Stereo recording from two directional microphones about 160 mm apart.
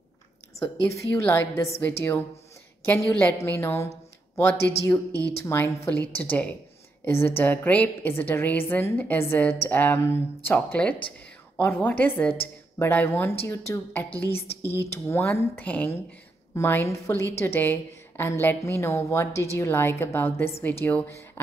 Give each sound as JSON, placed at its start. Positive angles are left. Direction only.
{"t": 1.1, "sound": "a woman's voice", "side_deg": 15}